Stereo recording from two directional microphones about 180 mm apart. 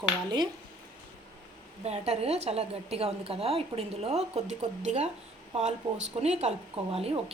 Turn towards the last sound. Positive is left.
turn(degrees=-30)  # may be behind; listen again after turning